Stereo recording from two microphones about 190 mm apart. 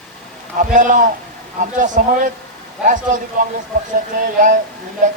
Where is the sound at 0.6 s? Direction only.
40° right (ahead or behind).